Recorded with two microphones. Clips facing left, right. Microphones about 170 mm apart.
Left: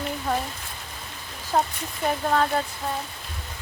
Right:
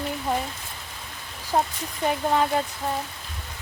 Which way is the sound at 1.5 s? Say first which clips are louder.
Even; 15° right (ahead or behind).